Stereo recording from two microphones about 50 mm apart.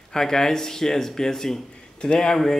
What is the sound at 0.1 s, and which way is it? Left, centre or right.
Speech, centre.